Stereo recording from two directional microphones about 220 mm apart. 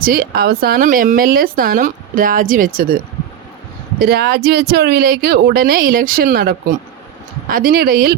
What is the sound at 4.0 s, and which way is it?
Speech, 45° right (ahead or behind).